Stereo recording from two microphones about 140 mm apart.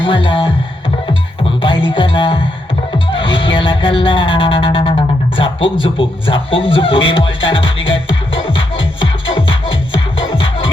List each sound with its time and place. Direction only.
0.0 s music: 35° left (ahead or behind)
1.6 s music: 35° left (ahead or behind)